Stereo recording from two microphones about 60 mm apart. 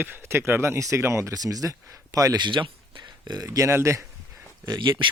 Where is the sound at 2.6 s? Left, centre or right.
Right.